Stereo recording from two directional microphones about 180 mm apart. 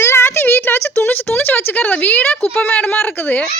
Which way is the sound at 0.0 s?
15° left (ahead or behind).